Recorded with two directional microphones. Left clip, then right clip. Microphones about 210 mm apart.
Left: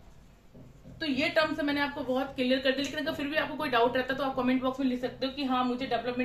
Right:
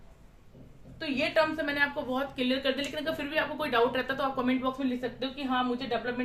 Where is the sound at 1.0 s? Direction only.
20° right (ahead or behind).